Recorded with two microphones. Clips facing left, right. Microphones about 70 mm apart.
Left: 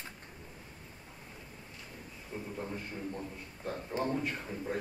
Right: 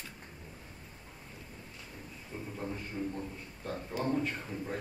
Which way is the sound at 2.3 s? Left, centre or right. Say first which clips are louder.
Left 1 dB; centre.